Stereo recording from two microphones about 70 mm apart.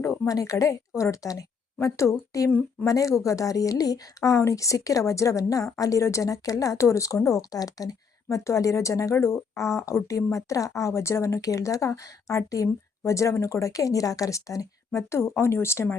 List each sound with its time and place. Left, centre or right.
0.3 s speech: left
8.4 s speech: left